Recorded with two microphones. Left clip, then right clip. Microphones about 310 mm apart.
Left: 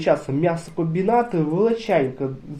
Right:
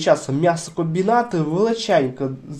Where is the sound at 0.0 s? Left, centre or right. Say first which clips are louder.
Right 3 dB; right.